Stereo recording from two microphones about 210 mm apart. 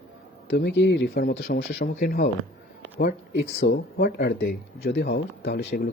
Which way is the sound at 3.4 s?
60° left (ahead or behind).